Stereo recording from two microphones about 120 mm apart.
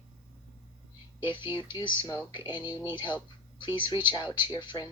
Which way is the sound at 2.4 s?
15° right (ahead or behind).